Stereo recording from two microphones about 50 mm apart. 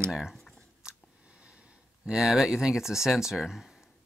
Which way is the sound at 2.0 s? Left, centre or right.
Centre.